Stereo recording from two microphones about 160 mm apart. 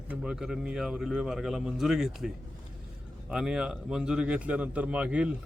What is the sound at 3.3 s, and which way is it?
A man's voice, 5° right (ahead or behind).